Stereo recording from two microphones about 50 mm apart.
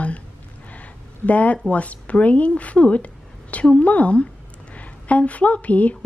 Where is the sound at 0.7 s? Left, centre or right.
Left.